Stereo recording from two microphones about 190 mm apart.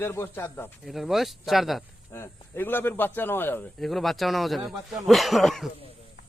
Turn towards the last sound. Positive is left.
turn(degrees=0)  # may be behind; listen again after turning